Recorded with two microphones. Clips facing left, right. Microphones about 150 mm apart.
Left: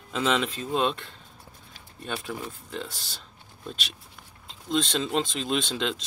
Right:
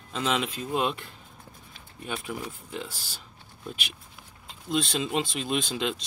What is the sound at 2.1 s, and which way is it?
Speech, 5° right (ahead or behind).